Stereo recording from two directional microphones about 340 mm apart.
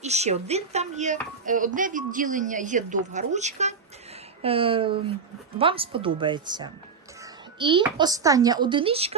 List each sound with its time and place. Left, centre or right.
0.0 s a woman's voice: centre